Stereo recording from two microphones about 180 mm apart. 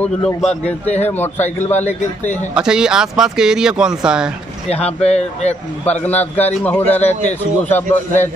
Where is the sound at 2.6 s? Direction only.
5° right (ahead or behind).